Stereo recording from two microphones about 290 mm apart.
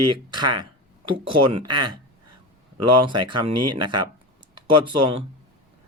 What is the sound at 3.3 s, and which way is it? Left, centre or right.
Speech, right.